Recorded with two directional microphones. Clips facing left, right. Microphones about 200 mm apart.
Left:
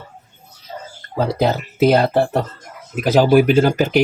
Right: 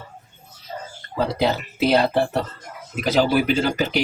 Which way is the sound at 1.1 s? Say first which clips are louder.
Left 3 dB; 45° left (ahead or behind).